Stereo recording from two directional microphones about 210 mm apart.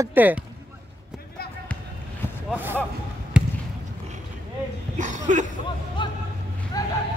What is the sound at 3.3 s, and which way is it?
Basketball bounce, 5° right (ahead or behind).